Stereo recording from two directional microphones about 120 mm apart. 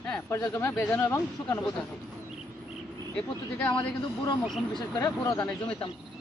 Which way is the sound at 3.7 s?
40° left (ahead or behind).